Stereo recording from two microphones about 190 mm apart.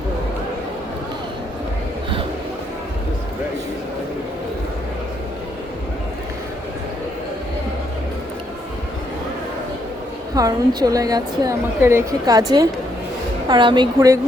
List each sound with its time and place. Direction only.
10.3 s a woman's voice: 20° right (ahead or behind)